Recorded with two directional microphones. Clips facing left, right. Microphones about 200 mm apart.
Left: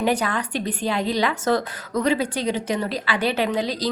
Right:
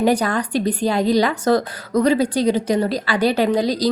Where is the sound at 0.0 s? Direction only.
40° right (ahead or behind).